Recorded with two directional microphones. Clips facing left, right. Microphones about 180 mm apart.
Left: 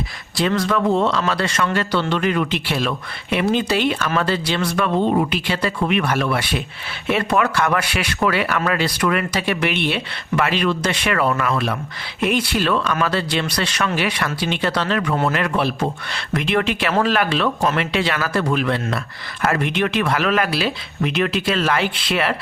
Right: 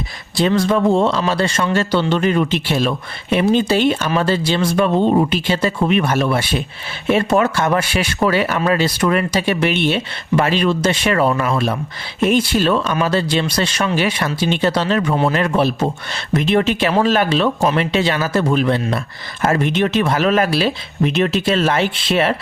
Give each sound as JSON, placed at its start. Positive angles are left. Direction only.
{"t": 0.3, "sound": "speech", "side_deg": -25}